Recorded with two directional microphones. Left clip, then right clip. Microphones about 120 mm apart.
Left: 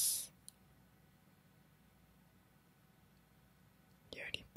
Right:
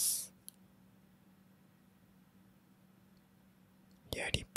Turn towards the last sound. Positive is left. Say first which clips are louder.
# right 8 dB
turn(degrees=-25)  # may be behind; listen again after turning